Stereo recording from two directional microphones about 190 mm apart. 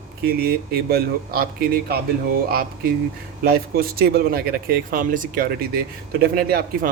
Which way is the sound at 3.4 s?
50° right (ahead or behind).